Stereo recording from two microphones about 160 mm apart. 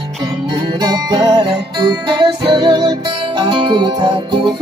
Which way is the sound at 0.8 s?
25° right (ahead or behind).